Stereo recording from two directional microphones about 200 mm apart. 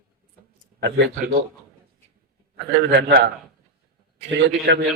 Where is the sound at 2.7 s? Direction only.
55° right (ahead or behind).